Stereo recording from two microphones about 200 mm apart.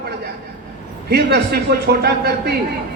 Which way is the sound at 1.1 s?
55° right (ahead or behind).